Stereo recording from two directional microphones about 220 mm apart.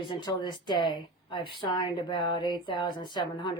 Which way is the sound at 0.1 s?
20° left (ahead or behind).